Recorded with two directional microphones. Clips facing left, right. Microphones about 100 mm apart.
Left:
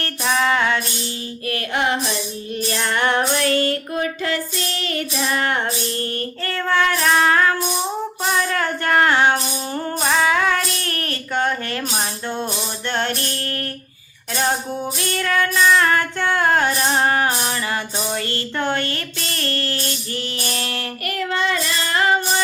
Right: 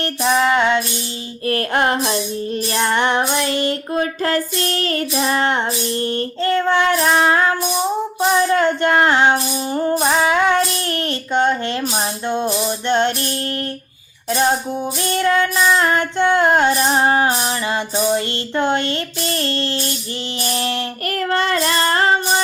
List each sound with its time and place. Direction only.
0.0 s child singing: 20° right (ahead or behind)
1.5 s music: 40° right (ahead or behind)
2.6 s child singing: 30° right (ahead or behind)
4.0 s child singing: 45° right (ahead or behind); by 11.8 s 20° right (ahead or behind)
12.9 s child singing: 20° right (ahead or behind)
15.1 s child singing: 25° right (ahead or behind)
21.1 s child singing: 50° right (ahead or behind); by 22.4 s 30° right (ahead or behind)